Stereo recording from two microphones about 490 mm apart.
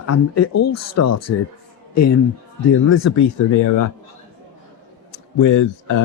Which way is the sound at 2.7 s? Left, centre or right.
Left.